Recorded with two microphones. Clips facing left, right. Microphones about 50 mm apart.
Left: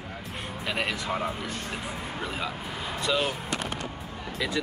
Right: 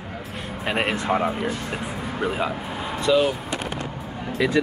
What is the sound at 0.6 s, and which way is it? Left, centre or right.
Speech, right.